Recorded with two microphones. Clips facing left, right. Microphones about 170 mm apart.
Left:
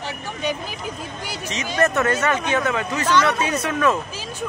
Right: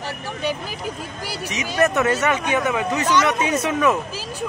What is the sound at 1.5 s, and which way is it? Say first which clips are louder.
Speech: right 1 dB; 15° right (ahead or behind).